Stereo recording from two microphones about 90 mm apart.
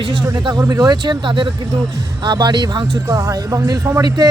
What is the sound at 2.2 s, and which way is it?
Speech, 55° right (ahead or behind).